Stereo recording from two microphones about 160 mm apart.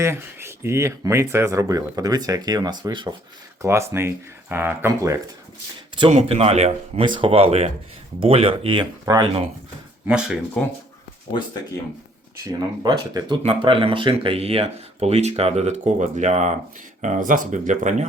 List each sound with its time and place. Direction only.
0.0 s speech: 15° right (ahead or behind)
3.6 s speech: 15° right (ahead or behind)
6.1 s speech: 40° right (ahead or behind)
7.0 s speech: 30° right (ahead or behind)
10.1 s speech: 5° right (ahead or behind)
10.6 s speech: 5° left (ahead or behind)
12.5 s speech: 25° right (ahead or behind)
13.4 s speech: 35° right (ahead or behind)